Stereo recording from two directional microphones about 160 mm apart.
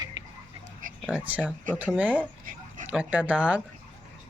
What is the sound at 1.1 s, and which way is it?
Speech, 10° right (ahead or behind).